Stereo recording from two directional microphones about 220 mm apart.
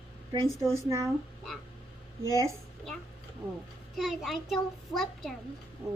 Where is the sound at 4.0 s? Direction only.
Centre (ahead or behind).